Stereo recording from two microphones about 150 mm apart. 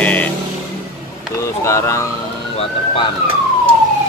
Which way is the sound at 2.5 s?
40° left (ahead or behind).